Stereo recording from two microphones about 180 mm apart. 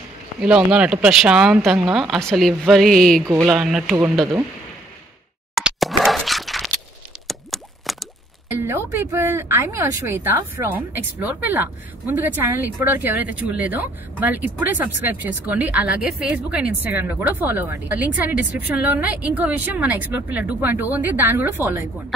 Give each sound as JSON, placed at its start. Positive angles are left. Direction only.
{"t": 0.7, "sound": "speech", "side_deg": -5}
{"t": 5.5, "sound": "a sound", "side_deg": -5}
{"t": 7.2, "sound": "plop", "side_deg": 0}
{"t": 8.5, "sound": "speech", "side_deg": -10}